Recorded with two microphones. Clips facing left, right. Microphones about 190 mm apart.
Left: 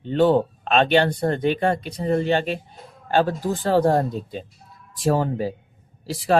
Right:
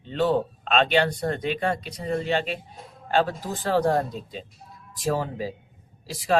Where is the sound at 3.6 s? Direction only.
30° left (ahead or behind).